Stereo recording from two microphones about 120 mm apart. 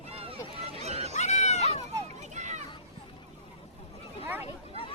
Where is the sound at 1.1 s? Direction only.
70° left (ahead or behind).